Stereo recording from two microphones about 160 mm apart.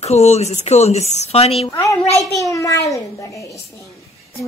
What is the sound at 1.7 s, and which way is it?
A child's voice, 20° left (ahead or behind).